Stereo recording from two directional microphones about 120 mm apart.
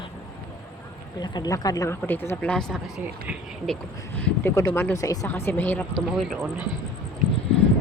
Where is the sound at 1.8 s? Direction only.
20° left (ahead or behind).